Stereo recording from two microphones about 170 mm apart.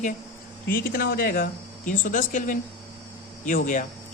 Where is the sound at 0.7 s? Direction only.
60° left (ahead or behind).